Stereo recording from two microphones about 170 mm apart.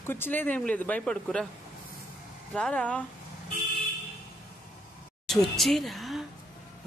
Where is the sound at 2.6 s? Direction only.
5° left (ahead or behind).